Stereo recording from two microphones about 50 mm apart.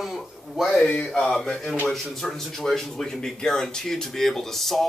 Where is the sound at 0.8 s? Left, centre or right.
Left.